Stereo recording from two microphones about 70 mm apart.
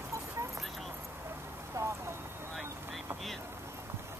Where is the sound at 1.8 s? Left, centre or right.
Right.